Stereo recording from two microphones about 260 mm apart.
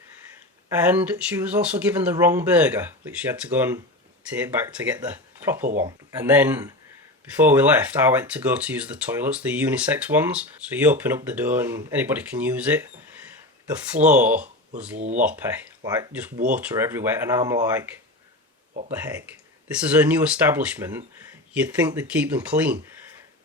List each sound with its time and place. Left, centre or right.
0.8 s speech: centre
14.0 s speech: centre
14.9 s speech: right
15.2 s speech: centre
18.9 s speech: centre